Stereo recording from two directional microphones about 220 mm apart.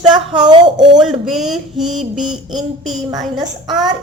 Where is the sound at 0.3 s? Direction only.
20° right (ahead or behind).